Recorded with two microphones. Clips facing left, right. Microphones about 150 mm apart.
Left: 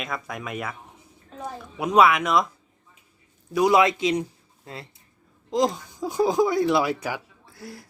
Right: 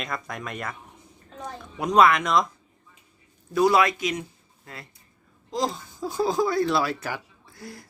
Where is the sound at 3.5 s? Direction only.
15° left (ahead or behind).